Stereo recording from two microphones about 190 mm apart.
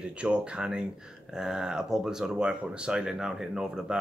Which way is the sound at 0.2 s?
5° right (ahead or behind).